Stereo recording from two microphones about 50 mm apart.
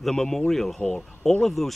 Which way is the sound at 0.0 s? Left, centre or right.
Centre.